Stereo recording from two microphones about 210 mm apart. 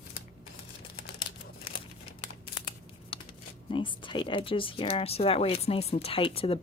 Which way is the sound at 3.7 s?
25° left (ahead or behind).